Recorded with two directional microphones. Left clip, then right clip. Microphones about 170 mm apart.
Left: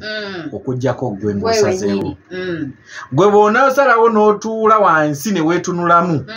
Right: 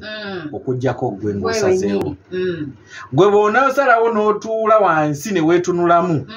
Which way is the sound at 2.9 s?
10° left (ahead or behind).